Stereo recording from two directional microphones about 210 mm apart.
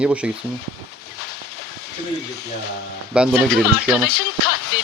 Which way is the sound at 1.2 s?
50° left (ahead or behind).